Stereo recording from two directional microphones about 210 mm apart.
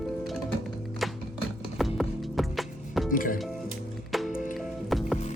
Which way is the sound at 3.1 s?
40° left (ahead or behind).